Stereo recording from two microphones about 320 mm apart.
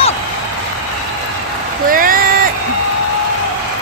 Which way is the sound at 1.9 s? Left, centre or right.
Right.